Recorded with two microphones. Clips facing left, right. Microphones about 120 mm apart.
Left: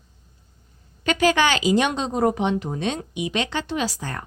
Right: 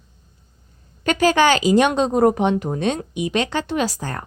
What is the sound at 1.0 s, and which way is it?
A woman's voice, 40° right (ahead or behind).